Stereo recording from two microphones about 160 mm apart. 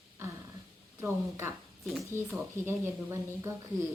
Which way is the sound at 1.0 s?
15° right (ahead or behind).